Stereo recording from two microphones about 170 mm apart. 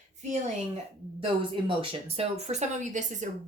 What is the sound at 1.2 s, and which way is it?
Speech, 30° right (ahead or behind).